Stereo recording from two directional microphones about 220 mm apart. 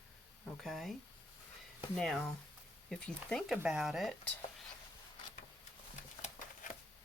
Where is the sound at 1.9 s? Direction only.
Centre (ahead or behind).